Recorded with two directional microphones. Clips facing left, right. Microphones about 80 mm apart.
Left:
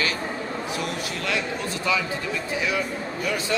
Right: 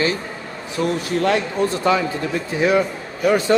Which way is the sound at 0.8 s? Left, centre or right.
Right.